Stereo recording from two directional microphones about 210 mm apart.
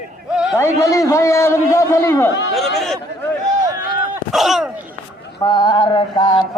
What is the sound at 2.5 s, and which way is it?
Speech, centre (ahead or behind).